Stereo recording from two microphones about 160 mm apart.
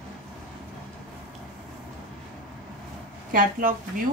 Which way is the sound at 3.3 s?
60° right (ahead or behind).